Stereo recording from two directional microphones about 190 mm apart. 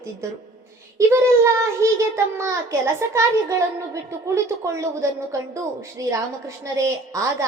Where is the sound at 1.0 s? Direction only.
15° right (ahead or behind).